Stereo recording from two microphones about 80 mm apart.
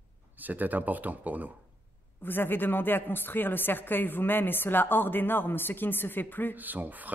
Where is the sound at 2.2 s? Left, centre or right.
Left.